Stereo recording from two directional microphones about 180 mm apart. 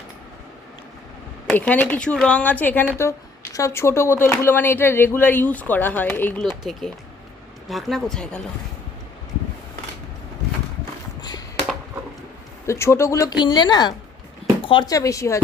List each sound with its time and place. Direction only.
1.5 s speech: 5° left (ahead or behind)
11.2 s a sound: 20° left (ahead or behind)
12.6 s speech: 15° left (ahead or behind)